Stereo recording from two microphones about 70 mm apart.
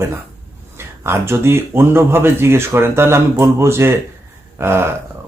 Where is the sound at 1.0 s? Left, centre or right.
Right.